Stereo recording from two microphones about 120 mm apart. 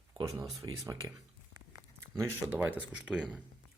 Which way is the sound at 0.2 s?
35° right (ahead or behind).